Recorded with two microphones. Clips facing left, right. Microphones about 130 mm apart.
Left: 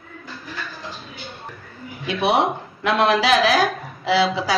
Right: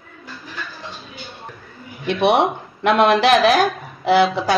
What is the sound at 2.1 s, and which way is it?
A woman's voice, 65° right (ahead or behind).